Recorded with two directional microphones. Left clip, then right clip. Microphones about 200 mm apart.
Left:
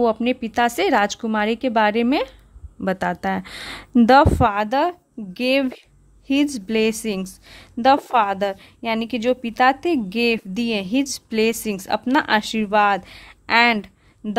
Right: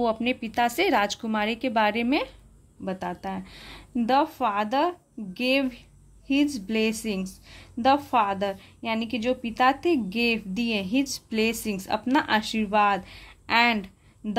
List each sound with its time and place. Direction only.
0.0 s speech: 20° left (ahead or behind)
2.8 s a woman's voice: 35° left (ahead or behind)